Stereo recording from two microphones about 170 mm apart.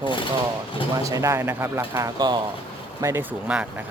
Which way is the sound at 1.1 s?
15° right (ahead or behind).